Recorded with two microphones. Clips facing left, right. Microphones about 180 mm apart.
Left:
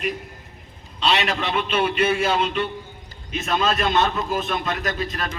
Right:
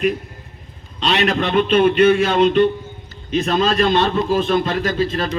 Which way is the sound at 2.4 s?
35° right (ahead or behind).